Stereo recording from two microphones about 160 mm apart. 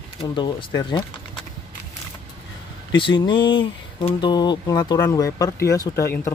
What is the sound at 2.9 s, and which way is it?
Speech, 30° left (ahead or behind).